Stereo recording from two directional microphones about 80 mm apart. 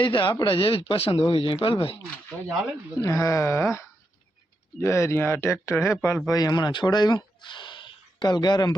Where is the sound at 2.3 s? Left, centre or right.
Left.